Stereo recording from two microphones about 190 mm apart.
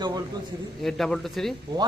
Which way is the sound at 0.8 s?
Centre (ahead or behind).